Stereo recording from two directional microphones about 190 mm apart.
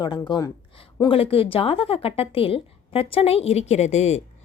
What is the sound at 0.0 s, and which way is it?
A woman's voice, 25° left (ahead or behind).